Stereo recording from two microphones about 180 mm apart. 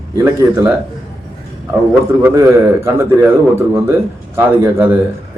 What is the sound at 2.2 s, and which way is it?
Speech, 15° right (ahead or behind).